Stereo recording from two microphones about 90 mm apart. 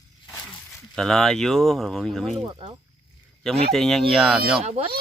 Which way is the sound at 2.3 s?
80° right.